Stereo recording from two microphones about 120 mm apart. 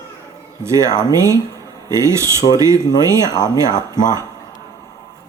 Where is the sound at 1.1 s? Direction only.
25° right (ahead or behind).